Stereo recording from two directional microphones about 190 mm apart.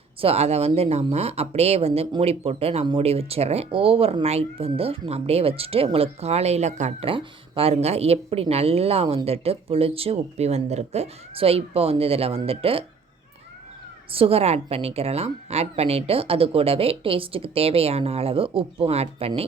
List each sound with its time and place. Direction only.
0.2 s speech: 30° right (ahead or behind)
14.1 s speech: 30° right (ahead or behind)